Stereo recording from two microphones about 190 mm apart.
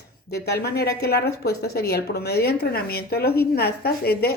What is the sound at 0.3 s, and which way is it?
A woman's voice, 55° left (ahead or behind).